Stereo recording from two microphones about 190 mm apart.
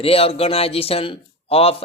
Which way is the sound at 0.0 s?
30° left (ahead or behind).